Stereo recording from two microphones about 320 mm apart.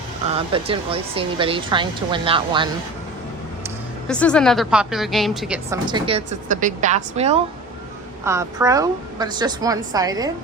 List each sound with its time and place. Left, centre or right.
0.3 s speech: centre
4.1 s a woman's voice: centre
5.9 s speech: centre
8.2 s speech: centre